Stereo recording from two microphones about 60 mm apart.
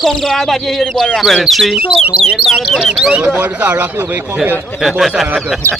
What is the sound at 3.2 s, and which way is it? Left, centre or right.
Speech, right.